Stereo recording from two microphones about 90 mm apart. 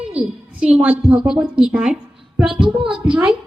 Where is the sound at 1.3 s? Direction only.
15° right (ahead or behind).